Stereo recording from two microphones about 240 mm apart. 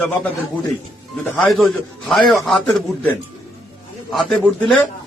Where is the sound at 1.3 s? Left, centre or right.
Centre.